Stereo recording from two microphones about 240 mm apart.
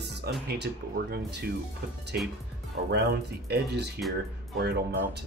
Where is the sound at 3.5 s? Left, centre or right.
Right.